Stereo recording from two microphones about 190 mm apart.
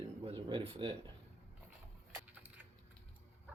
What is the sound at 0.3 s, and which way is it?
Speech, 30° right (ahead or behind).